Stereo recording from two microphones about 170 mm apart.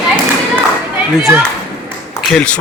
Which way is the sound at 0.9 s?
10° right (ahead or behind).